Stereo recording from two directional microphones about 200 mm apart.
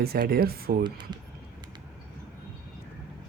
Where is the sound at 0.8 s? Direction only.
20° right (ahead or behind).